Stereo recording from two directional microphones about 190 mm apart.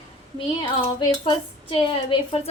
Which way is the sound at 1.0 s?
25° left (ahead or behind).